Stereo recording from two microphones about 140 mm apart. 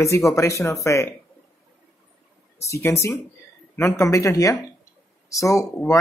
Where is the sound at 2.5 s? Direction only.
20° left (ahead or behind).